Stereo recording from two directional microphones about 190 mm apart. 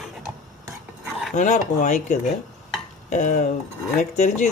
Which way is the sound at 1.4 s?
40° left (ahead or behind).